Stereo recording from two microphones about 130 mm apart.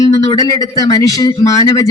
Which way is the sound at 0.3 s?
25° left (ahead or behind).